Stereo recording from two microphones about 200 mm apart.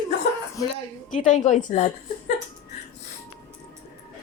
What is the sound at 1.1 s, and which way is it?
A woman's voice, 40° left (ahead or behind).